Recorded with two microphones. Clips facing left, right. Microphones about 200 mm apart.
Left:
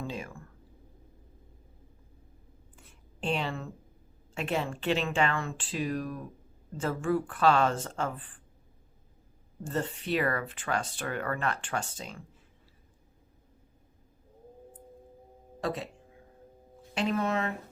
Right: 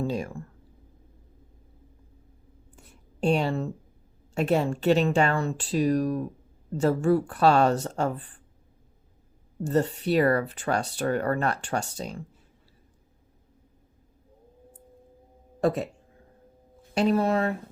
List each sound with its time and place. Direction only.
0.1 s speech: 40° right (ahead or behind)
2.7 s a sound: 40° right (ahead or behind)
4.4 s speech: 40° right (ahead or behind)
9.6 s speech: 40° right (ahead or behind)
16.9 s speech: 40° right (ahead or behind)